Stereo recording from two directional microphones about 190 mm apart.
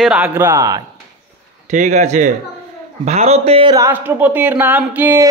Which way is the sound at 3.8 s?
10° right (ahead or behind).